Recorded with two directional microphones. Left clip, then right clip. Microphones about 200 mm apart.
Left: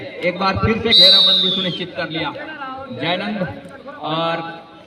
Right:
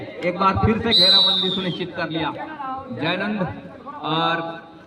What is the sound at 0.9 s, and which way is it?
Speech, 35° right (ahead or behind).